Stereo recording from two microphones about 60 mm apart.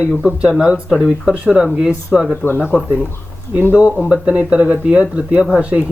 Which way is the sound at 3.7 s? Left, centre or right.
Centre.